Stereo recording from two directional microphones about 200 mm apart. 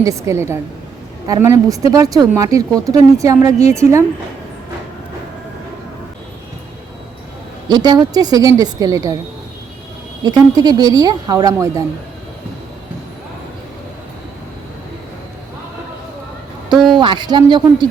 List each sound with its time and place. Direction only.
0.0 s speech: 15° right (ahead or behind)
7.7 s a woman's voice: 20° right (ahead or behind)
10.2 s a woman's voice: 20° right (ahead or behind)
16.9 s a woman's voice: 25° right (ahead or behind)